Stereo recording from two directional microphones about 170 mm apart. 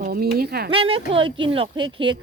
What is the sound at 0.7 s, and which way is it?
Speech, 30° right (ahead or behind).